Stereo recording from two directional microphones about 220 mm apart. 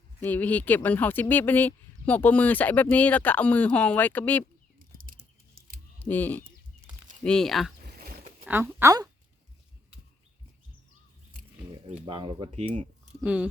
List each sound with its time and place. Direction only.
0.2 s speech: 10° left (ahead or behind)
5.5 s camera: 40° right (ahead or behind)
6.0 s speech: 10° left (ahead or behind)
7.8 s a sound: 40° right (ahead or behind)
8.4 s speech: 10° right (ahead or behind)
11.7 s speech: 20° right (ahead or behind)
13.2 s speech: 5° right (ahead or behind)